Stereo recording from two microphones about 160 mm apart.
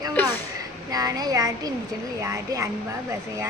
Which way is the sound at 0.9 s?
20° right (ahead or behind).